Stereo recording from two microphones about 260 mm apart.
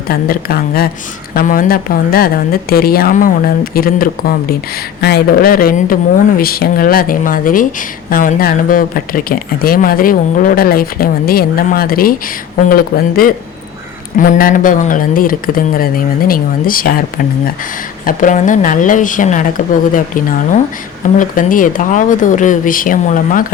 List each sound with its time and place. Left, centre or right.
0.1 s speech: left
18.0 s speech: left